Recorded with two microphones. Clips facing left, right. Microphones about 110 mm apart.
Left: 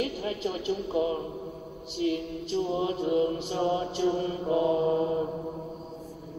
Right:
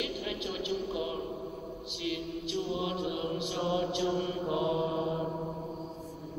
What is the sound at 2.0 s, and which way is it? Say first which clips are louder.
Chant: left 7 dB; 40° left (ahead or behind).